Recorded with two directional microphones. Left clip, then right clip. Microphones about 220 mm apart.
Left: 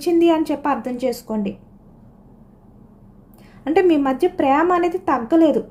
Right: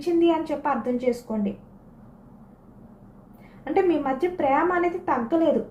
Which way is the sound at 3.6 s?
55° left (ahead or behind).